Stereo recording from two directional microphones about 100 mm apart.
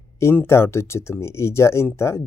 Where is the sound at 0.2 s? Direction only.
25° left (ahead or behind).